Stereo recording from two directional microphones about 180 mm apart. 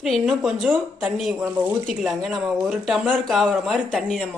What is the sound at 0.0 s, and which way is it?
Speech, centre (ahead or behind).